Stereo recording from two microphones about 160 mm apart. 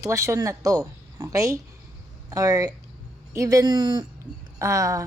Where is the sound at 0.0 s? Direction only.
20° right (ahead or behind).